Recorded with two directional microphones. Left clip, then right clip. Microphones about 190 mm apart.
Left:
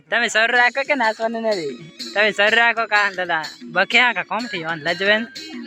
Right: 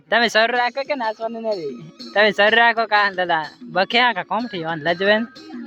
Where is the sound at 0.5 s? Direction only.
5° left (ahead or behind).